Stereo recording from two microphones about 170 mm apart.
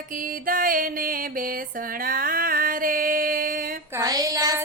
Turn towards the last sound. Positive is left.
turn(degrees=-20)  # may be behind; listen again after turning